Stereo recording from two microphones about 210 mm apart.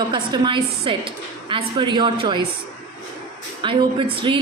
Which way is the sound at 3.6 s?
25° right (ahead or behind).